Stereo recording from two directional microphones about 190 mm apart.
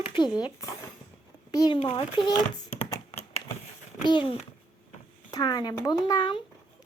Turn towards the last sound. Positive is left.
turn(degrees=25)  # may be behind; listen again after turning